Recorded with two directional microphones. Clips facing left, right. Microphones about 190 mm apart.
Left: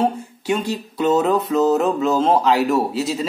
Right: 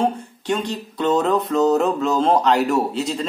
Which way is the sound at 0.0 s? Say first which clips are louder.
Left 1 dB; 10° left (ahead or behind).